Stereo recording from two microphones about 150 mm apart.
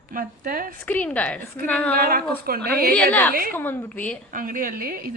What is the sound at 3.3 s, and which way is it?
Speech, 75° right (ahead or behind).